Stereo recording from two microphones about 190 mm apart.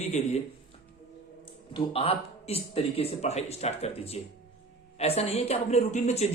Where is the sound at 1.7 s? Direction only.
30° left (ahead or behind).